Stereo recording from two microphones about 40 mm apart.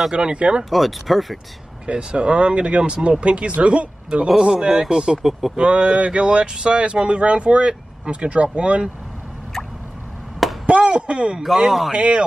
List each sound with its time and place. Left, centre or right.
0.1 s speech: right
0.7 s speech: centre
1.9 s speech: right
4.4 s speech: centre
10.7 s chop: right
11.4 s speech: centre
11.9 s speech: right